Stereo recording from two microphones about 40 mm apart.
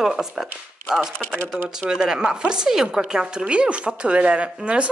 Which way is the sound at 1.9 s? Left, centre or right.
Centre.